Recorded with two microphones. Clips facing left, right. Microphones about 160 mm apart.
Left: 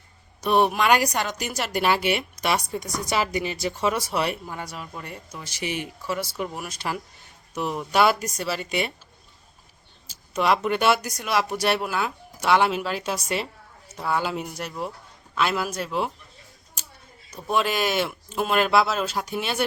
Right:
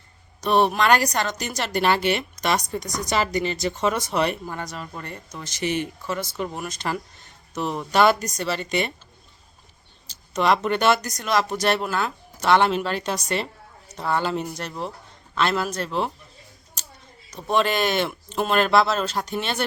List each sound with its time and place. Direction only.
0.4 s a woman's voice: 10° left (ahead or behind)
10.1 s a woman's voice: 5° left (ahead or behind)
16.8 s a sound: 10° left (ahead or behind)
17.5 s a woman's voice: 5° left (ahead or behind)